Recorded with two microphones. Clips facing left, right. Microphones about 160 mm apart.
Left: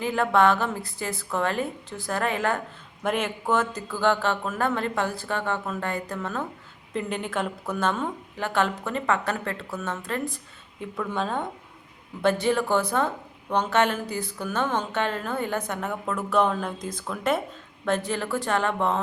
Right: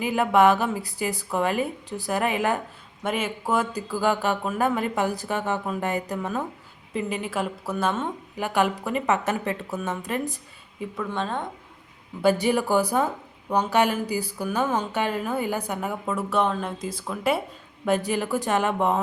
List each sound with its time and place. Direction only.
0.0 s a woman's voice: 15° right (ahead or behind)
3.0 s a woman's voice: 5° right (ahead or behind)
10.8 s a woman's voice: centre (ahead or behind)
12.2 s a woman's voice: 10° right (ahead or behind)